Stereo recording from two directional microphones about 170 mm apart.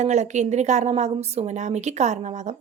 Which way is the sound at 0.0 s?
45° right (ahead or behind).